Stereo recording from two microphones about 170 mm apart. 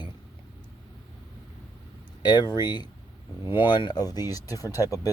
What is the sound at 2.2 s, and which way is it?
Speech, 25° left (ahead or behind).